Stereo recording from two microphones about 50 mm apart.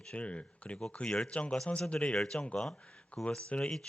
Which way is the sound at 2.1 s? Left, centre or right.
Centre.